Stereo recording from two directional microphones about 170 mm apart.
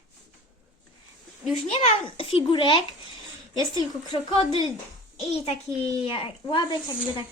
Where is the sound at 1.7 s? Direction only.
35° left (ahead or behind).